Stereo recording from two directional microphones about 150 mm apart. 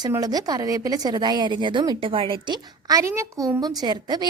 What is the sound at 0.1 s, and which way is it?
A woman's voice, 25° right (ahead or behind).